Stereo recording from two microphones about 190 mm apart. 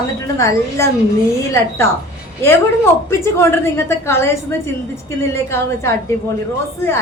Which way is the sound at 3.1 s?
15° left (ahead or behind).